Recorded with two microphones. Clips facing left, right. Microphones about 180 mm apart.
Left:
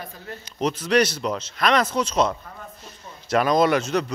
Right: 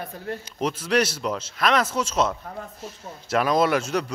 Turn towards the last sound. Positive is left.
turn(degrees=-5)  # may be behind; listen again after turning